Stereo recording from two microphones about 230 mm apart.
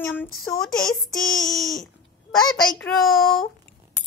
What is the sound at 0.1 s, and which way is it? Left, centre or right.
Speech, centre.